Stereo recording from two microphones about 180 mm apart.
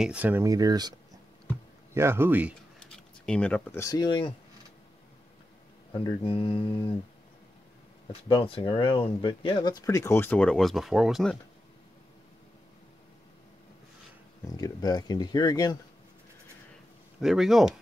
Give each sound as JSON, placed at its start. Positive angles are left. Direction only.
{"t": 0.0, "sound": "speech", "side_deg": -5}
{"t": 2.0, "sound": "speech", "side_deg": -15}
{"t": 2.8, "sound": "speech", "side_deg": 5}
{"t": 6.0, "sound": "speech", "side_deg": 30}
{"t": 8.3, "sound": "speech", "side_deg": 30}
{"t": 14.6, "sound": "speech", "side_deg": 20}
{"t": 17.2, "sound": "speech", "side_deg": 0}